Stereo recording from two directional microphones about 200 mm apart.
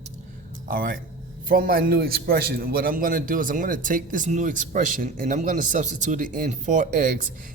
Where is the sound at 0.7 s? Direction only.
45° right (ahead or behind).